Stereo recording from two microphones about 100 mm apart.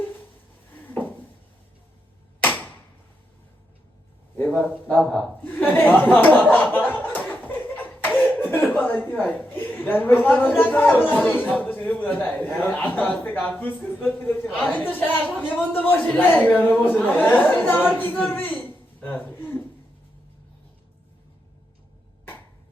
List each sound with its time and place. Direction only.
0.8 s a sound: 15° left (ahead or behind)
4.4 s speech: 15° left (ahead or behind)
5.1 s chuckle: 15° left (ahead or behind)
10.6 s speech: 20° left (ahead or behind)
15.4 s speech: centre (ahead or behind)
15.7 s speech: 15° left (ahead or behind)